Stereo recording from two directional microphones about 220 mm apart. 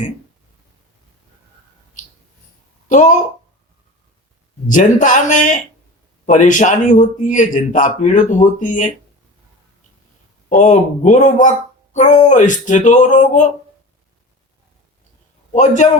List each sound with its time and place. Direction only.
2.9 s a man's voice: 35° left (ahead or behind)
4.6 s a man's voice: 35° left (ahead or behind)
10.5 s a man's voice: 35° left (ahead or behind)
15.5 s a man's voice: 35° left (ahead or behind)